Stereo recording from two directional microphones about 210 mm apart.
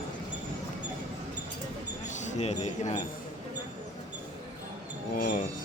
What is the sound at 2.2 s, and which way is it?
Speech, 30° left (ahead or behind).